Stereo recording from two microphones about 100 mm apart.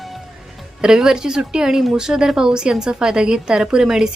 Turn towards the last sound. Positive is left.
turn(degrees=-5)  # may be behind; listen again after turning